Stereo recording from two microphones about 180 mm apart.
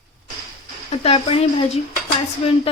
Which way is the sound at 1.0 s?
35° left (ahead or behind).